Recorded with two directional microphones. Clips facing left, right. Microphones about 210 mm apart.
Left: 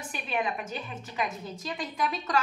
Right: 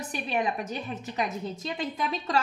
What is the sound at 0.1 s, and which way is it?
Speech, 40° right (ahead or behind).